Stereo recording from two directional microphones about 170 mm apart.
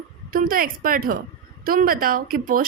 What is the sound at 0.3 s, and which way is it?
Speech, 55° right (ahead or behind).